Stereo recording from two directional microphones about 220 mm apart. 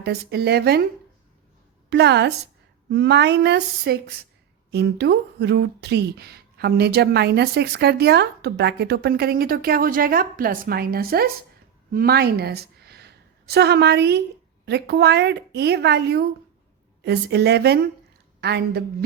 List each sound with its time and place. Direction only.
0.0 s speech: 45° right (ahead or behind)
1.9 s a woman's voice: 50° right (ahead or behind)